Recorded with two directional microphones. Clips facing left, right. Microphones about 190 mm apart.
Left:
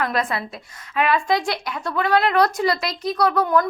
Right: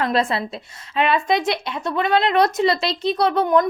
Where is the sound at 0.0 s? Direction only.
25° right (ahead or behind).